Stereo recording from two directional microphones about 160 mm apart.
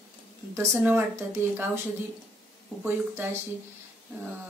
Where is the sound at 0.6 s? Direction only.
15° right (ahead or behind).